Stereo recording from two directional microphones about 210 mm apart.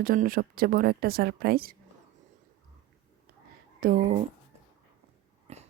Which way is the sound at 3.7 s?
40° right (ahead or behind).